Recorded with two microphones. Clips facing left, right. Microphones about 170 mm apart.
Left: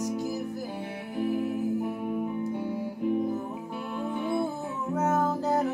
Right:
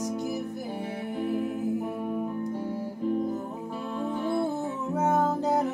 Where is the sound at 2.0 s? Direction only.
5° left (ahead or behind).